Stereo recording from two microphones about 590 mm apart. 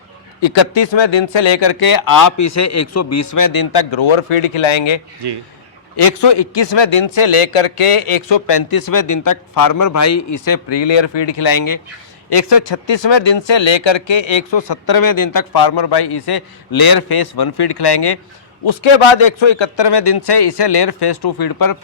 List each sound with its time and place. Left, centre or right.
0.4 s speech: left
5.2 s speech: right
6.0 s speech: left
18.6 s speech: left